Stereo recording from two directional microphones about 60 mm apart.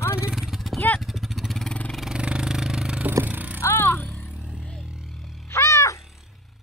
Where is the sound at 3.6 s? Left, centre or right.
Left.